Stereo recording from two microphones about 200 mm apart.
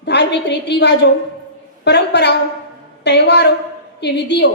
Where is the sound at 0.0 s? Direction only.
60° left (ahead or behind).